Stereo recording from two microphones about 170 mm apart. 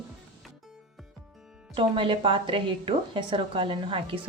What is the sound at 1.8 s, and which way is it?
A woman's voice, 30° right (ahead or behind).